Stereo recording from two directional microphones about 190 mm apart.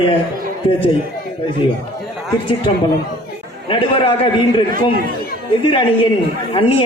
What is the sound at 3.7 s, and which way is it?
Speech, 25° left (ahead or behind).